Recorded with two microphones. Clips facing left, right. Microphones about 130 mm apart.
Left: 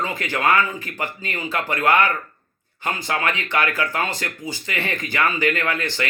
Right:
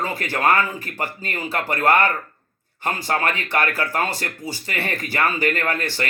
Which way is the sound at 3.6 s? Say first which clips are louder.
Even; 35° right (ahead or behind).